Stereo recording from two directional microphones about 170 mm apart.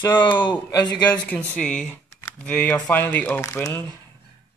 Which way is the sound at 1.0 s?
5° left (ahead or behind).